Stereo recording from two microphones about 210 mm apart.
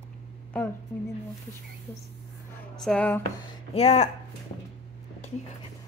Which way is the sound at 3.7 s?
30° left (ahead or behind).